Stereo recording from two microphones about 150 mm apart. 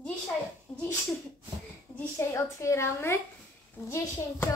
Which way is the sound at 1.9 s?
20° left (ahead or behind).